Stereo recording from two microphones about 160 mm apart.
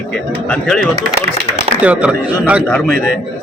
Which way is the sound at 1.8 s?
10° right (ahead or behind).